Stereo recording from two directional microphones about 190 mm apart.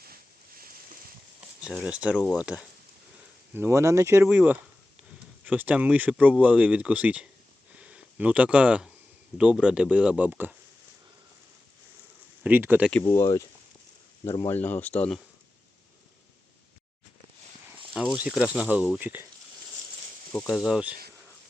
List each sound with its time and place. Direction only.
0.0 s a sound: 50° right (ahead or behind)
1.6 s speech: 5° right (ahead or behind)
12.4 s speech: 10° right (ahead or behind)
12.9 s speech: 10° left (ahead or behind)
17.9 s speech: 5° right (ahead or behind)
20.3 s speech: centre (ahead or behind)